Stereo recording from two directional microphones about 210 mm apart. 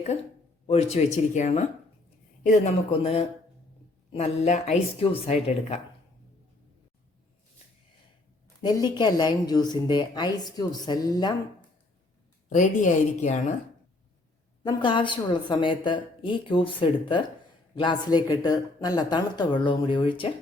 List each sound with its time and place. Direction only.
0.7 s speech: 30° left (ahead or behind)
8.6 s speech: 20° left (ahead or behind)
12.5 s speech: 35° left (ahead or behind)
14.6 s speech: 20° left (ahead or behind)